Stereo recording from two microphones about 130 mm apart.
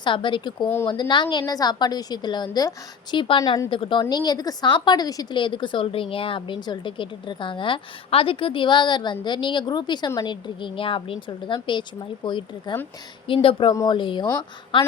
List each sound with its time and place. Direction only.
0.0 s a woman's voice: 40° left (ahead or behind)